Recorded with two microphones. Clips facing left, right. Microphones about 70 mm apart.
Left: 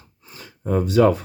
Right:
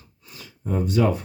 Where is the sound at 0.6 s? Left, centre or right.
Left.